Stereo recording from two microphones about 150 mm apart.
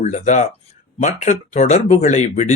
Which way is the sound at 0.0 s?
50° left (ahead or behind).